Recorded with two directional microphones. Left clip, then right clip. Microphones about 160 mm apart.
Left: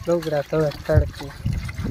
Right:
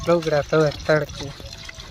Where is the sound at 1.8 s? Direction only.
20° left (ahead or behind).